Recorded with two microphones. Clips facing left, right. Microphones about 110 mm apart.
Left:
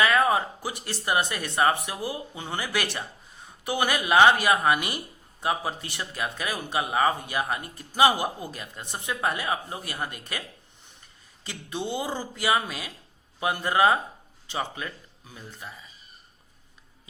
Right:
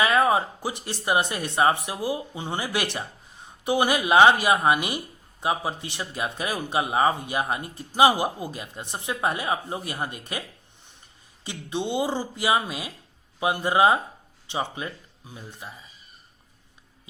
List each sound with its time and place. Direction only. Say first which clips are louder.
0.3 s a sound: right 2 dB; 20° right (ahead or behind)
0.9 s a man's voice: right 2 dB; 20° right (ahead or behind)
11.4 s a man's voice: right 3 dB; 20° right (ahead or behind)